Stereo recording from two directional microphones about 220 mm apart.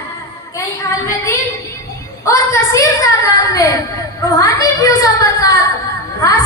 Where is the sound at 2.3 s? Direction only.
15° left (ahead or behind).